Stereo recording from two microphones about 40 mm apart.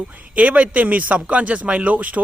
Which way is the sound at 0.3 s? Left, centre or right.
Right.